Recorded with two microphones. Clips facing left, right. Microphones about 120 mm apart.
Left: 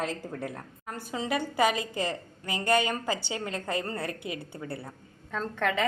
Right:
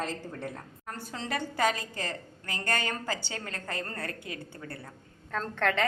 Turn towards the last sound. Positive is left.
turn(degrees=10)  # may be behind; listen again after turning